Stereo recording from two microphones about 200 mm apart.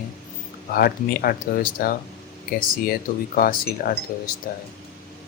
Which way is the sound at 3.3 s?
45° left (ahead or behind).